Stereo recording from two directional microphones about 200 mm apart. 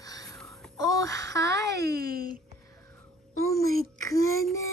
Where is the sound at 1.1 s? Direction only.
60° right (ahead or behind).